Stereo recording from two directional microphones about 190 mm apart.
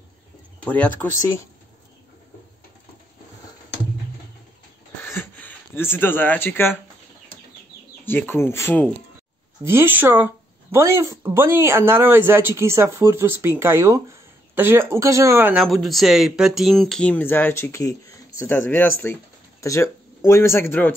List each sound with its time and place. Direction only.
5.0 s a sound: 10° left (ahead or behind)
8.0 s speech: 10° left (ahead or behind)
9.7 s speech: 10° right (ahead or behind); by 20.9 s 10° left (ahead or behind)